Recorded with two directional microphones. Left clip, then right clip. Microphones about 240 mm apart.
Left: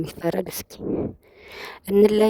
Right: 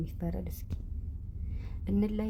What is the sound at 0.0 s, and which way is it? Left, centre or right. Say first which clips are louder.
Speech: left 16 dB; left.